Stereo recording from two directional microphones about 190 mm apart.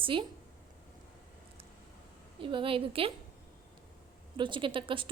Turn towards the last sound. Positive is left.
turn(degrees=-25)  # may be behind; listen again after turning